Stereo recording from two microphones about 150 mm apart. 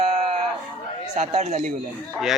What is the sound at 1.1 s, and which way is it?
Speech, 45° right (ahead or behind).